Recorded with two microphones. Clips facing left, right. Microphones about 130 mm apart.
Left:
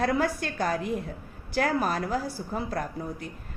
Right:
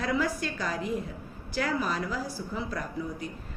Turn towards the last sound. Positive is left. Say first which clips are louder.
# even
turn(degrees=50)  # may be behind; listen again after turning